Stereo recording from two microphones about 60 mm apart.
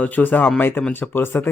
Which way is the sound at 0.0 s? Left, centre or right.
Left.